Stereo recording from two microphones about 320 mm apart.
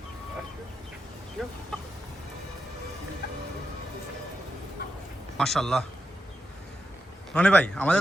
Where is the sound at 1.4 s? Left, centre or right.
Centre.